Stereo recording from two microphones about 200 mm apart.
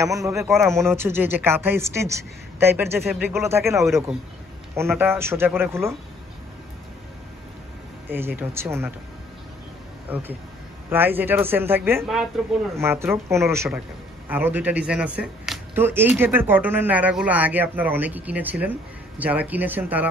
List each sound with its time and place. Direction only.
0.0 s speech: 15° right (ahead or behind)
8.1 s speech: 10° right (ahead or behind)
10.0 s speech: 10° right (ahead or behind)